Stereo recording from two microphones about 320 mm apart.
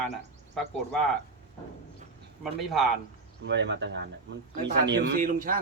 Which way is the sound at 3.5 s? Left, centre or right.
Right.